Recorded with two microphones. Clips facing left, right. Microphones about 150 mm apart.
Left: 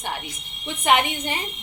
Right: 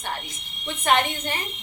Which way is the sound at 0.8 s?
15° left (ahead or behind).